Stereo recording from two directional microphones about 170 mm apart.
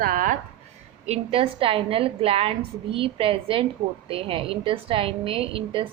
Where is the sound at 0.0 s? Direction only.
50° right (ahead or behind).